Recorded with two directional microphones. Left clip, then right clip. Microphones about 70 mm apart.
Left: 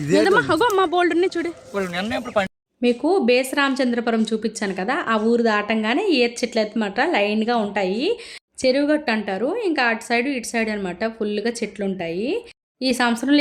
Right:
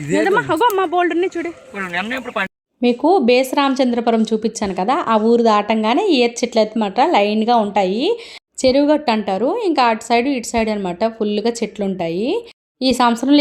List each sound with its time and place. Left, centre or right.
0.1 s speech: centre
0.6 s speech: right
0.9 s speech: right
1.2 s speech: right
2.8 s a woman's voice: right
13.1 s a woman's voice: right